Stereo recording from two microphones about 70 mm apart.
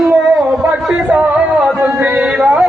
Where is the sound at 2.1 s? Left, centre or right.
Centre.